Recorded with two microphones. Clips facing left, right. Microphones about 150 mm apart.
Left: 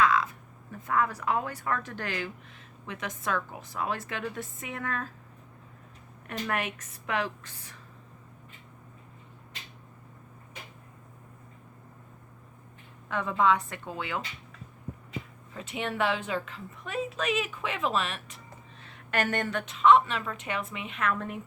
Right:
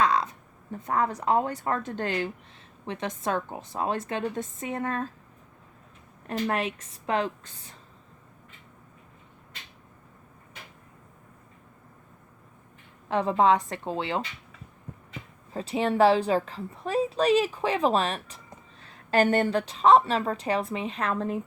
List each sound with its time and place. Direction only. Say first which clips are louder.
0.7 s a woman's voice: right 2 dB; 35° right (ahead or behind)
6.2 s a woman's voice: right 4 dB; 30° right (ahead or behind)
13.1 s a woman's voice: right 4 dB; 30° right (ahead or behind)
15.5 s a woman's voice: right 8 dB; 35° right (ahead or behind)